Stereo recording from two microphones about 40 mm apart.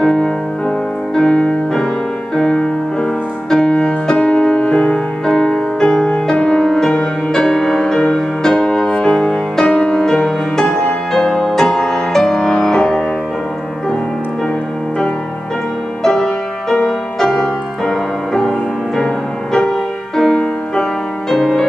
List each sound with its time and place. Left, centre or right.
0.0 s music: centre
2.5 s music: centre
6.6 s music: centre
16.0 s music: centre